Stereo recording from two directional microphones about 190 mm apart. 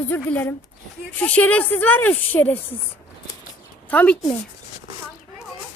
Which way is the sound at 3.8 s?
5° left (ahead or behind).